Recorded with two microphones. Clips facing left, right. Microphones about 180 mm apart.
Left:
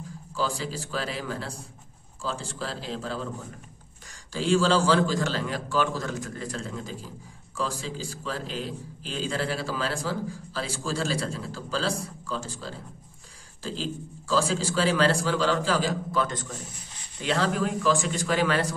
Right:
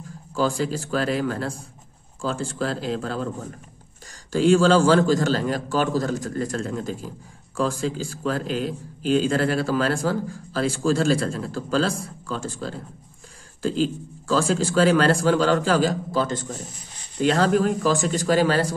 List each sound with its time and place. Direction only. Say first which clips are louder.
0.4 s a man's voice: right 7 dB; 50° right (ahead or behind)
4.3 s a man's voice: right 6 dB; 50° right (ahead or behind)
16.1 s speech: right 4 dB; 30° right (ahead or behind)
17.2 s speech: right 7 dB; 45° right (ahead or behind)